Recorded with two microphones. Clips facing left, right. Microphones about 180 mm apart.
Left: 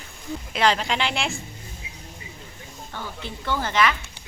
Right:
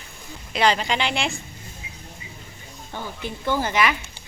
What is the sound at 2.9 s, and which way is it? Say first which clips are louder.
Speech: right 3 dB; 15° right (ahead or behind).